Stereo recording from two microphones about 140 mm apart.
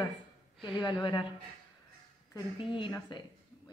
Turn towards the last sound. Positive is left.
turn(degrees=35)  # may be behind; listen again after turning